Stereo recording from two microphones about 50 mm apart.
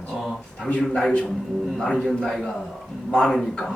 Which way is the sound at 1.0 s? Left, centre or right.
Centre.